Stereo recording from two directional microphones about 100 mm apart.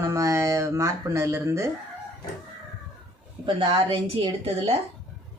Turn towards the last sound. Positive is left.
turn(degrees=-75)  # may be behind; listen again after turning